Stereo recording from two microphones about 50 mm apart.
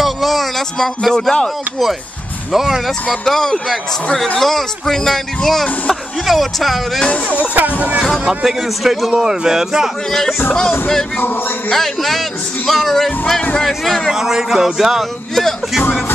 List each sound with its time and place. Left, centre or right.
0.0 s a sound: centre
1.1 s speech: centre
2.5 s speech: centre
3.3 s speech: centre
7.0 s speech: left
7.3 s speech: right
8.5 s a man's voice: centre
11.1 s music: left
11.7 s speech: centre
14.1 s a man's voice: centre
15.3 s speech: centre